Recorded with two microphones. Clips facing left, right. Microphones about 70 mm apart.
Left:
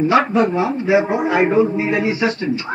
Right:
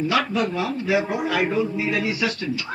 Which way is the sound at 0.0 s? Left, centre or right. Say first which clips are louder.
Left 7 dB; left.